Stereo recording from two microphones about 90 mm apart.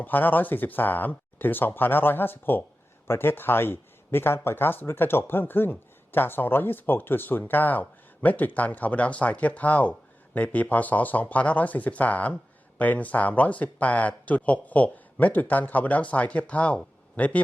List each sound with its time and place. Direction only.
0.0 s speech: 20° left (ahead or behind)